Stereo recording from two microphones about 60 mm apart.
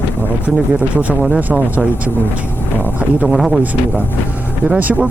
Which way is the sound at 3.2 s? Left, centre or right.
Centre.